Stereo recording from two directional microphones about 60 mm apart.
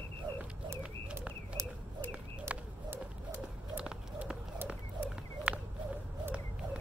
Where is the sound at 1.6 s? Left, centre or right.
Right.